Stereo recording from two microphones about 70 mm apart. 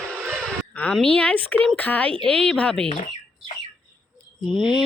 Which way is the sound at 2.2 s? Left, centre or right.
Centre.